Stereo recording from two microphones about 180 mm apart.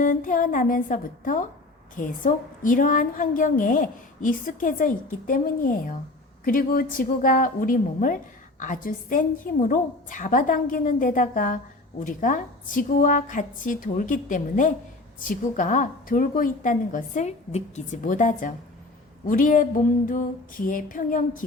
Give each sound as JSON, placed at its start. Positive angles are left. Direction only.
{"t": 0.0, "sound": "a woman's voice", "side_deg": 45}